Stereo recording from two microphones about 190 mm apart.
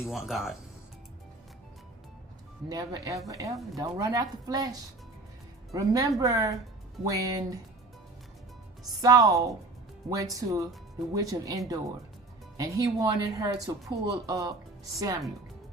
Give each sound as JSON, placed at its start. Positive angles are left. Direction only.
{"t": 0.0, "sound": "speech", "side_deg": 0}
{"t": 2.6, "sound": "speech", "side_deg": -20}
{"t": 9.0, "sound": "speech", "side_deg": -20}